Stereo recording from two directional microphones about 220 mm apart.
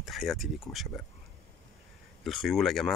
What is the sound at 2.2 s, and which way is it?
Speech, centre (ahead or behind).